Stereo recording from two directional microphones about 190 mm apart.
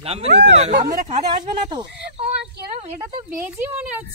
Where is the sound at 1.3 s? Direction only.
25° right (ahead or behind).